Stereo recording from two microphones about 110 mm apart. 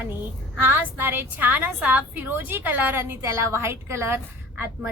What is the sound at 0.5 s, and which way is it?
A woman's voice, 15° right (ahead or behind).